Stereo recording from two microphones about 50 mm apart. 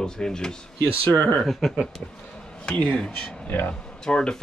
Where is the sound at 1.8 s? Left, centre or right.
Centre.